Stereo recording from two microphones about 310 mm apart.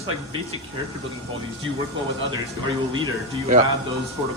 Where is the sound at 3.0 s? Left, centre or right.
Centre.